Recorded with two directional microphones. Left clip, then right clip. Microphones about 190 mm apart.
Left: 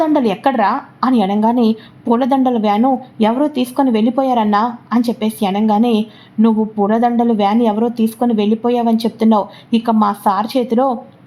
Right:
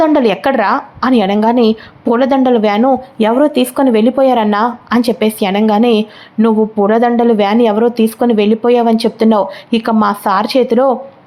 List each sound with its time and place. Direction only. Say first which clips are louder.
0.0 s speech: right 4 dB; centre (ahead or behind)
3.2 s a woman's voice: right 6 dB; 15° right (ahead or behind)